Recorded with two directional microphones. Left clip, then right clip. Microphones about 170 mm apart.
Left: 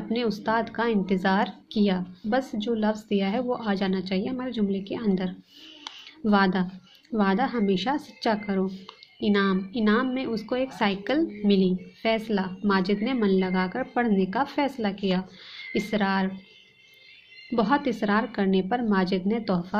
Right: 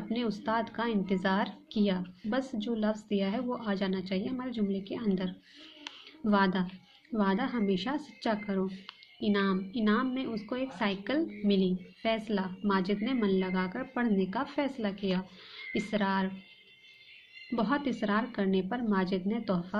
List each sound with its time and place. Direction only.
0.1 s a woman's voice: 15° left (ahead or behind)
17.5 s a woman's voice: 15° left (ahead or behind)